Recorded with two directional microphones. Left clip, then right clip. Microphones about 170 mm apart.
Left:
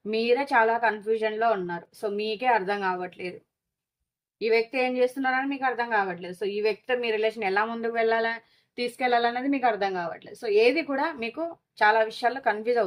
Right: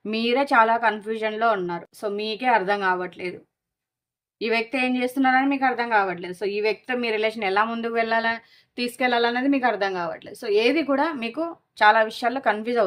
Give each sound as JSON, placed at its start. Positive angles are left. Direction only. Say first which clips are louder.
{"t": 0.0, "sound": "a woman's voice", "louder": "right 1 dB", "side_deg": -45}
{"t": 4.4, "sound": "a woman's voice", "louder": "even", "side_deg": -45}